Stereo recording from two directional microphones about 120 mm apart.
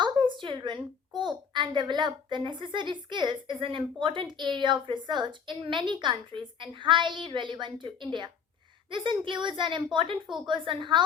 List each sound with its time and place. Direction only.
0.0 s a woman's voice: 40° right (ahead or behind)